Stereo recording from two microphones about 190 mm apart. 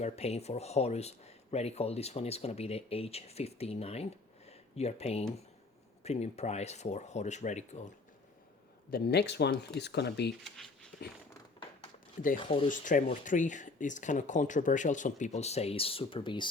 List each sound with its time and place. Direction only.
0.0 s speech: 35° left (ahead or behind)
8.9 s speech: 55° left (ahead or behind)
12.4 s speech: 25° left (ahead or behind)
12.6 s speech: 45° left (ahead or behind); by 16.5 s 25° left (ahead or behind)